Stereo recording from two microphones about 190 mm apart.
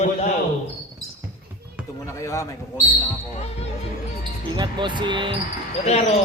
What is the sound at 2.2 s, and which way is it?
Speech, 15° left (ahead or behind).